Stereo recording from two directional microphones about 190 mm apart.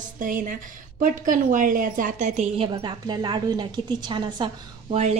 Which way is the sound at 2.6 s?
25° right (ahead or behind).